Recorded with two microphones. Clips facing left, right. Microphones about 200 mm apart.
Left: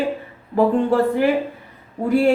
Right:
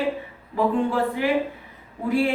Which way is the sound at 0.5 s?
45° left (ahead or behind).